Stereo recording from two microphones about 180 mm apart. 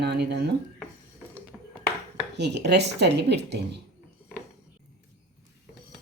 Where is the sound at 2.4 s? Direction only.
70° right (ahead or behind).